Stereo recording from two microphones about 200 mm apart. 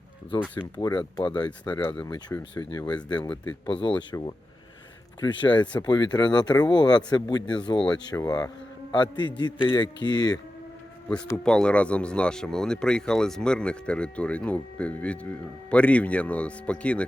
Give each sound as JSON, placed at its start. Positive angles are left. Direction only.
{"t": 0.8, "sound": "a man's voice", "side_deg": 20}
{"t": 11.4, "sound": "speech", "side_deg": 5}